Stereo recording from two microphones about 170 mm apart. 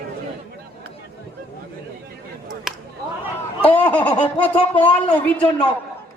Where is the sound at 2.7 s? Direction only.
Centre (ahead or behind).